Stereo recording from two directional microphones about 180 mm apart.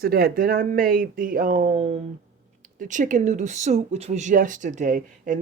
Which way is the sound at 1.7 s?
30° right (ahead or behind).